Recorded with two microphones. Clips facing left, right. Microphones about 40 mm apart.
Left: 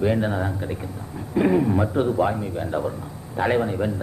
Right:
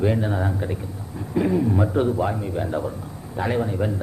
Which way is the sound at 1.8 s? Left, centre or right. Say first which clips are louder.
Right 1 dB; centre.